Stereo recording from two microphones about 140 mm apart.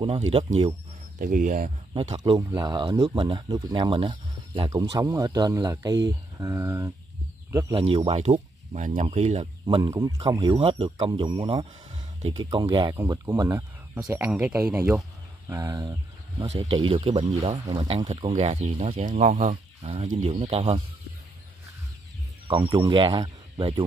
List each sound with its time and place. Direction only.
0.0 s speech: 40° right (ahead or behind)
1.2 s speech: 65° right (ahead or behind)
2.0 s speech: 45° right (ahead or behind)
2.3 s speech: 25° right (ahead or behind)
2.8 s speech: 40° right (ahead or behind)
4.9 s speech: 25° right (ahead or behind)
7.7 s speech: 40° right (ahead or behind)
8.2 s speech: 55° right (ahead or behind)
9.8 s speech: 25° right (ahead or behind)
10.5 s speech: 40° right (ahead or behind); by 14.0 s 25° right (ahead or behind)
14.0 s speech: 10° right (ahead or behind)
16.3 s speech: 40° right (ahead or behind)
19.5 s speech: 40° right (ahead or behind)
22.5 s speech: 35° right (ahead or behind)